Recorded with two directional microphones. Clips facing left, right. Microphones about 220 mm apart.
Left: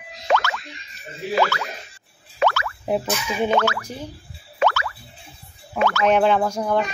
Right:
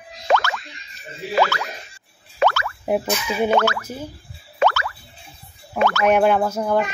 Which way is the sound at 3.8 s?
5° right (ahead or behind).